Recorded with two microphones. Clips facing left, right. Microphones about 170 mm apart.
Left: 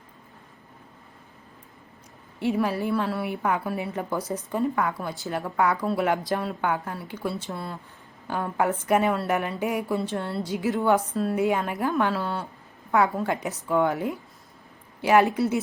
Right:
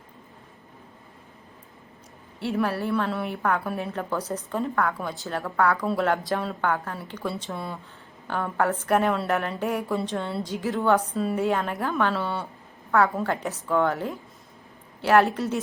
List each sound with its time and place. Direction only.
2.6 s speech: 15° left (ahead or behind)
2.9 s a woman's voice: 5° left (ahead or behind)
11.1 s a woman's voice: centre (ahead or behind)
11.3 s speech: 10° left (ahead or behind)
12.1 s a woman's voice: centre (ahead or behind)
13.1 s speech: 10° left (ahead or behind)